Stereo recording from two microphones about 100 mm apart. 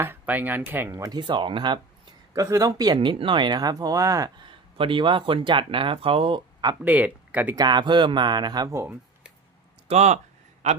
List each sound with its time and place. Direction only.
0.0 s speech: 20° right (ahead or behind)
1.1 s speech: 50° right (ahead or behind)
2.3 s speech: 30° right (ahead or behind)
2.7 s speech: 45° right (ahead or behind)
4.4 s speech: 60° right (ahead or behind)
6.8 s speech: 15° right (ahead or behind)
7.5 s speech: 45° right (ahead or behind)